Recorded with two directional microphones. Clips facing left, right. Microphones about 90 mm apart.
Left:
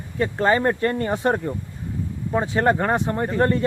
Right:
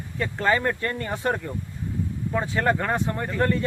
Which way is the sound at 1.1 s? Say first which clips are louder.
Left 5 dB; 25° left (ahead or behind).